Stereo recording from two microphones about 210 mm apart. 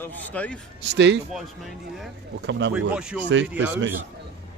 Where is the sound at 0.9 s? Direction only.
55° right (ahead or behind).